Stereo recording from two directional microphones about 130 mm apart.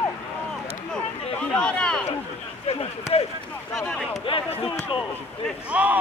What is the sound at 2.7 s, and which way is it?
Speech, 50° left (ahead or behind).